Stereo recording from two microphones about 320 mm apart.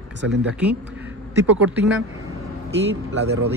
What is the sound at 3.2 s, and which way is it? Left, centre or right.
Speech, right.